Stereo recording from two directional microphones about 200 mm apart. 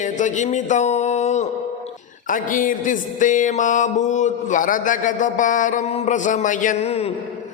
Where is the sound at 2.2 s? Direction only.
40° left (ahead or behind).